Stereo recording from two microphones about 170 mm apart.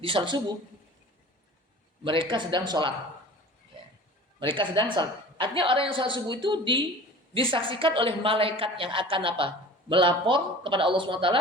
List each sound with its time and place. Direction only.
0.0 s a woman's voice: 30° right (ahead or behind)
2.0 s a woman's voice: 30° right (ahead or behind)
4.4 s a woman's voice: 30° right (ahead or behind)